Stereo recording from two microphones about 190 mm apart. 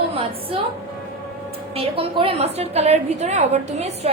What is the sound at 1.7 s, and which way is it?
A woman's voice, 30° right (ahead or behind).